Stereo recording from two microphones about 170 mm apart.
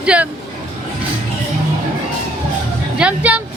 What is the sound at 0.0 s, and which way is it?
Speech, 5° right (ahead or behind).